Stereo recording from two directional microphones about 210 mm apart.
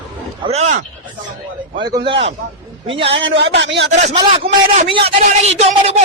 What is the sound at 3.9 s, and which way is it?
A man's voice, 30° right (ahead or behind).